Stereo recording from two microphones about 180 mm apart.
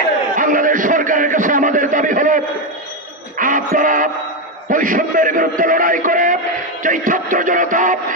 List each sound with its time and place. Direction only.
0.3 s a sound: 50° right (ahead or behind)
3.3 s music: 45° right (ahead or behind)
4.6 s a man's voice: 50° right (ahead or behind)